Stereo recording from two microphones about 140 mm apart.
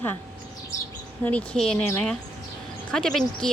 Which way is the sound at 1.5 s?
5° left (ahead or behind).